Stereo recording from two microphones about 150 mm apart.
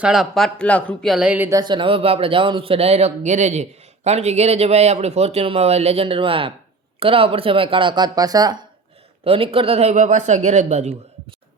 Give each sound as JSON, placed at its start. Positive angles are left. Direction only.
{"t": 0.0, "sound": "speech", "side_deg": -5}
{"t": 1.5, "sound": "speech", "side_deg": -25}
{"t": 9.2, "sound": "speech", "side_deg": -40}
{"t": 9.9, "sound": "speech", "side_deg": -55}